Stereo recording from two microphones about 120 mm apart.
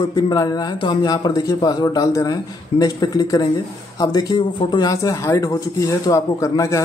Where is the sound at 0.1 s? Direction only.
35° left (ahead or behind).